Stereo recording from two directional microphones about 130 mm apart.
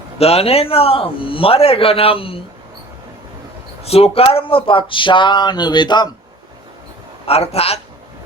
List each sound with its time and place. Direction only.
0.2 s a man's voice: 50° left (ahead or behind)
3.8 s speech: 50° left (ahead or behind); by 6.1 s 35° left (ahead or behind)
7.3 s a man's voice: 50° left (ahead or behind)